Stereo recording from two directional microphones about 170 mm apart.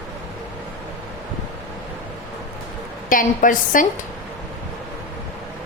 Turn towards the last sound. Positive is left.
turn(degrees=50)  # may be behind; listen again after turning